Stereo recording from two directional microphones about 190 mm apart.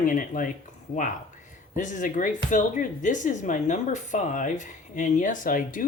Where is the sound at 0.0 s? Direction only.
45° left (ahead or behind).